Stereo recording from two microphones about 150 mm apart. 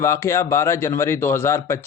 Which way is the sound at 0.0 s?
20° left (ahead or behind).